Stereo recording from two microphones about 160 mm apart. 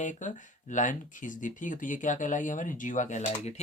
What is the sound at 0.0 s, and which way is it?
Speech, 50° left (ahead or behind).